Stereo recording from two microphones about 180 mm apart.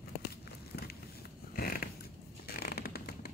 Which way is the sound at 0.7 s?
65° left (ahead or behind).